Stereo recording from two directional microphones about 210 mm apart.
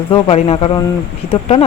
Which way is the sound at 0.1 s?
25° left (ahead or behind).